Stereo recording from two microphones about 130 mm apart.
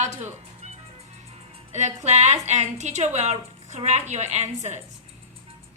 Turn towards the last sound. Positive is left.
turn(degrees=-60)  # may be behind; listen again after turning